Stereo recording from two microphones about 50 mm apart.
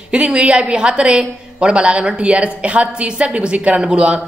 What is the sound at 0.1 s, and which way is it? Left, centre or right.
Speech, centre.